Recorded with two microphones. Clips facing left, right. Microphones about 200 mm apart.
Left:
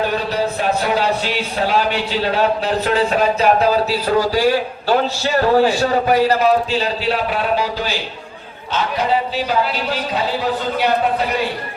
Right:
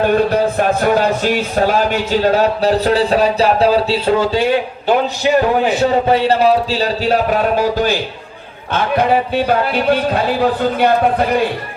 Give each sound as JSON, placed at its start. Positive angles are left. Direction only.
{"t": 0.2, "sound": "speech", "side_deg": -55}
{"t": 8.7, "sound": "speech", "side_deg": -55}